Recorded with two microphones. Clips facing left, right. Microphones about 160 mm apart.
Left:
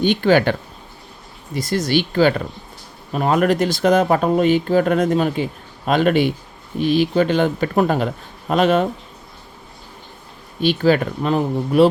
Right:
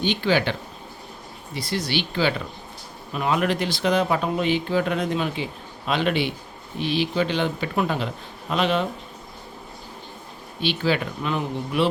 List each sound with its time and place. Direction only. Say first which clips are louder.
0.0 s speech: left 7 dB; 50° left (ahead or behind)
1.5 s speech: left 7 dB; 45° left (ahead or behind)
10.6 s speech: left 7 dB; 45° left (ahead or behind)